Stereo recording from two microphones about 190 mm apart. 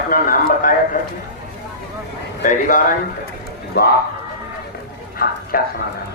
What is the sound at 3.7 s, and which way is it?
Speech, 60° left (ahead or behind).